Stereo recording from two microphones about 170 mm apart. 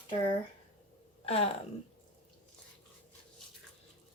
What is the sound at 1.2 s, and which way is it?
Speech, 35° left (ahead or behind).